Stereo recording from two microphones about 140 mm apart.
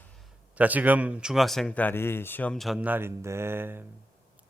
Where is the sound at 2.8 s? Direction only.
15° right (ahead or behind).